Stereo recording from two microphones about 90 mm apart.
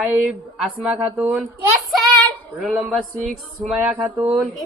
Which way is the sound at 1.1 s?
15° right (ahead or behind).